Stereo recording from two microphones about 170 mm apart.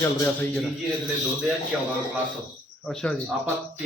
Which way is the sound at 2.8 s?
5° left (ahead or behind).